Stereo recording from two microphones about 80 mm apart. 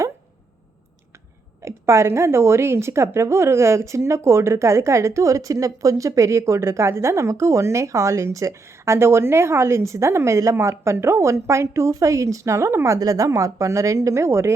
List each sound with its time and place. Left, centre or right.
1.6 s a woman's voice: right